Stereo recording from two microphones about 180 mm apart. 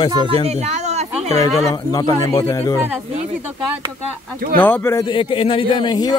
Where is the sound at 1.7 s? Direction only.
20° left (ahead or behind).